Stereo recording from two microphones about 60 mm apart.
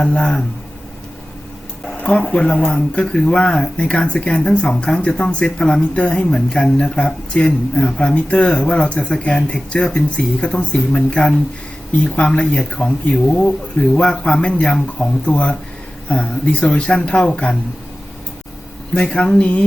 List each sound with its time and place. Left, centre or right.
0.0 s speech: centre
2.0 s speech: centre
18.9 s speech: centre